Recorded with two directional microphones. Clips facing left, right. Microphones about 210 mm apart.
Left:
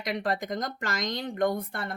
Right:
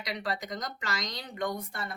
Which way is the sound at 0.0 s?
50° left (ahead or behind).